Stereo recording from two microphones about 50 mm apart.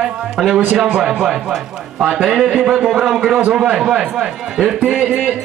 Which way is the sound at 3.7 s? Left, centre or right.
Centre.